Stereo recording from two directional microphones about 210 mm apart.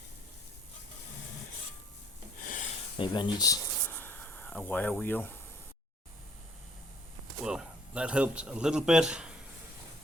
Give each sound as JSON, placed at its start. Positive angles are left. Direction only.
{"t": 2.4, "sound": "a sound", "side_deg": 40}
{"t": 3.0, "sound": "speech", "side_deg": 20}
{"t": 7.4, "sound": "speech", "side_deg": -5}